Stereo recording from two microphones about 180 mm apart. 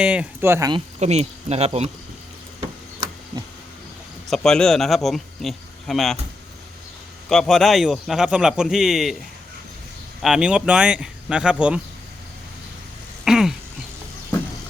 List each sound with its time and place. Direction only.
0.0 s speech: 5° right (ahead or behind)
0.9 s speech: 35° right (ahead or behind)
2.6 s a sound: 20° right (ahead or behind)
4.3 s speech: 5° left (ahead or behind)
7.3 s speech: centre (ahead or behind)
10.2 s speech: 5° right (ahead or behind)
13.2 s a sound: centre (ahead or behind)